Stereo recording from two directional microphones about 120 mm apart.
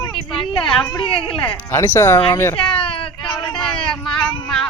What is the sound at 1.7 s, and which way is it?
Speech, 20° left (ahead or behind).